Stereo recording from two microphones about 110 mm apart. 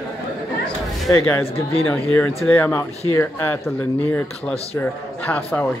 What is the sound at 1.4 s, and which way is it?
Speech, 60° left (ahead or behind).